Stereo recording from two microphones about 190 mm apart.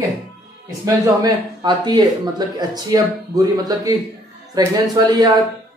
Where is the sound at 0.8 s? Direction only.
20° right (ahead or behind).